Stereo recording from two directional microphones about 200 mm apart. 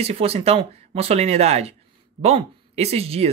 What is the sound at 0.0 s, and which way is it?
Speech, 30° right (ahead or behind).